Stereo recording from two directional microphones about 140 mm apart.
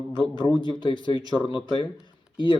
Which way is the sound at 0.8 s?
35° left (ahead or behind).